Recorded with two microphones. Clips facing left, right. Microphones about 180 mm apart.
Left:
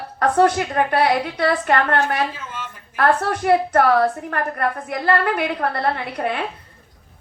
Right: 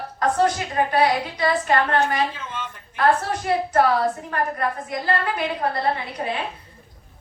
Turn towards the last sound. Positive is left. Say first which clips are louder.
# left 3 dB
turn(degrees=60)  # may be behind; listen again after turning